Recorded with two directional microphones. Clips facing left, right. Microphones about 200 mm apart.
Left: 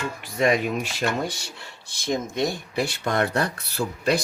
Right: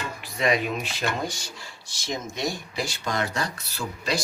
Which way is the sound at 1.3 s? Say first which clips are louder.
Left 2 dB; 60° left (ahead or behind).